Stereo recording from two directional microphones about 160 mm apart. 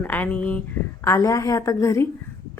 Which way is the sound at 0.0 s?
10° left (ahead or behind).